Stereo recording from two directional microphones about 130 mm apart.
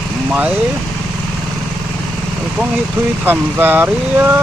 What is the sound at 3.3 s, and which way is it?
Speech, 15° right (ahead or behind).